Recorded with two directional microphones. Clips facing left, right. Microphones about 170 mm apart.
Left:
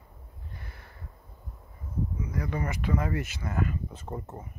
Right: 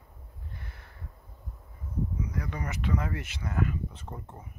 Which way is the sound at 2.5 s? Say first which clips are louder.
Left 3 dB; 10° left (ahead or behind).